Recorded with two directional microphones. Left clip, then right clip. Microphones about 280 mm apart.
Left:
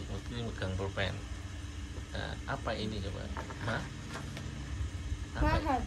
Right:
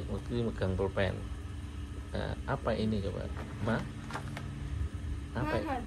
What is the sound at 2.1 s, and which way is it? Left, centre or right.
Speech, right.